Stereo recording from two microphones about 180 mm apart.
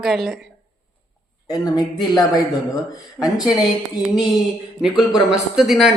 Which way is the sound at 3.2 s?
Centre (ahead or behind).